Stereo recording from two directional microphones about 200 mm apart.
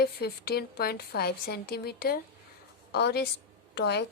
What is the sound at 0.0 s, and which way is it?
A woman's voice, 50° left (ahead or behind).